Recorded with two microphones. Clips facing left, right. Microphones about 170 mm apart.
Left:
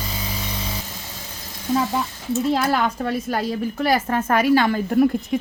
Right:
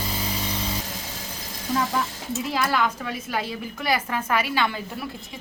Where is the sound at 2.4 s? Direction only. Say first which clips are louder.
Left 4 dB; 40° left (ahead or behind).